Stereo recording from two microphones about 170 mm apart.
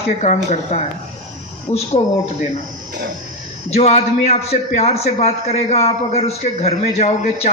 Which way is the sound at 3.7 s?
40° left (ahead or behind).